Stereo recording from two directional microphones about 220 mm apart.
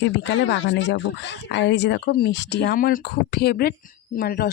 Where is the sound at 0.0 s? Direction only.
55° left (ahead or behind).